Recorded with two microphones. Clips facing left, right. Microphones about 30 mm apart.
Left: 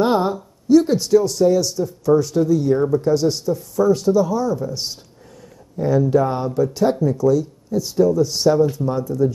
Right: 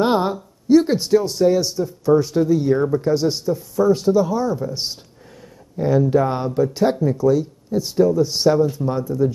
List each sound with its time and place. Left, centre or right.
0.0 s speech: centre